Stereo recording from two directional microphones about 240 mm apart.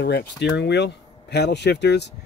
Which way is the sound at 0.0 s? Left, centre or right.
Left.